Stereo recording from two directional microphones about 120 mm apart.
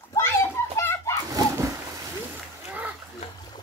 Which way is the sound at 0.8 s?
20° left (ahead or behind).